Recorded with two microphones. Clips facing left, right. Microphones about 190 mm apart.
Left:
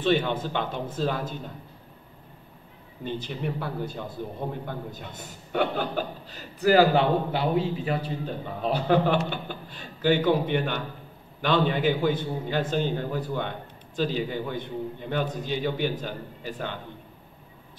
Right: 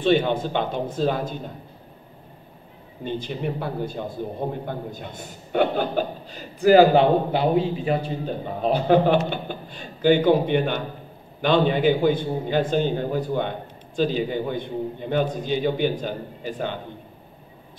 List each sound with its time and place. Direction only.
0.0 s a man's voice: 20° right (ahead or behind)
3.0 s a man's voice: 20° right (ahead or behind)